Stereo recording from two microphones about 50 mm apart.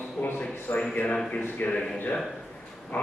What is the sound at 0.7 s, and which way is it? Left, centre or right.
Speech, left.